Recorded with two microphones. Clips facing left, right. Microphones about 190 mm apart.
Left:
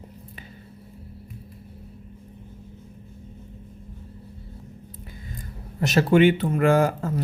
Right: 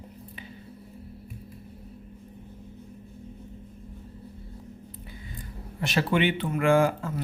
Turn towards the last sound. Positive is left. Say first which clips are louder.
# left 1 dB
turn(degrees=40)  # may be behind; listen again after turning